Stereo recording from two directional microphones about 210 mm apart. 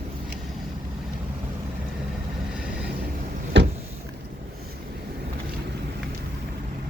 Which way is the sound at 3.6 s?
55° right (ahead or behind).